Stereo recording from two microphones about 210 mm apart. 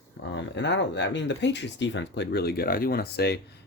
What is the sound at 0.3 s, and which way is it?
Speech, 55° left (ahead or behind).